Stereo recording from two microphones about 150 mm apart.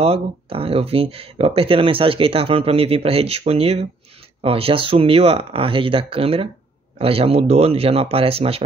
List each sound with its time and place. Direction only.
0.0 s speech: 40° right (ahead or behind)